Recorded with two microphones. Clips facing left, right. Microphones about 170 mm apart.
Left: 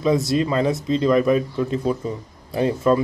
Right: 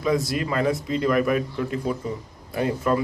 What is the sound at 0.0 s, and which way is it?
Speech, 25° left (ahead or behind).